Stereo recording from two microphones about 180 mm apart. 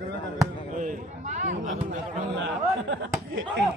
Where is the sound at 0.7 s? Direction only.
45° right (ahead or behind).